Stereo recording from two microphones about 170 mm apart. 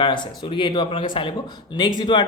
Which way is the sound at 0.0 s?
30° left (ahead or behind).